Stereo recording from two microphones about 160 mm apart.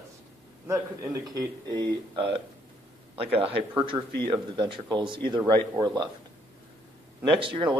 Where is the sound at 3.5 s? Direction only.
30° right (ahead or behind).